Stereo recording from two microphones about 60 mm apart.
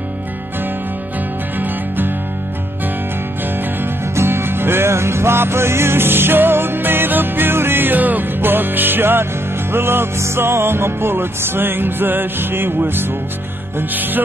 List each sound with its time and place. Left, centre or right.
1.6 s music: right
3.8 s music: right